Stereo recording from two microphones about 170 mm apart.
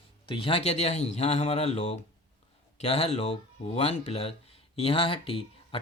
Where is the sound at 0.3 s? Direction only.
30° left (ahead or behind).